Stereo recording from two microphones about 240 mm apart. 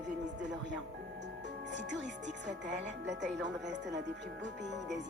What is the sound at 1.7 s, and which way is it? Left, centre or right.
A woman's voice, right.